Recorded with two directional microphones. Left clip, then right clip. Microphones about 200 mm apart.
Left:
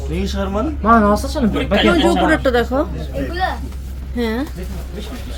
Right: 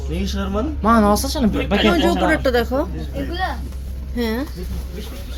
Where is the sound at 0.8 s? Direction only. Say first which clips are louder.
Left 3 dB; 50° right (ahead or behind).